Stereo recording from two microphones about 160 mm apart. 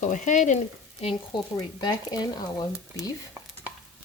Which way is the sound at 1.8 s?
25° left (ahead or behind).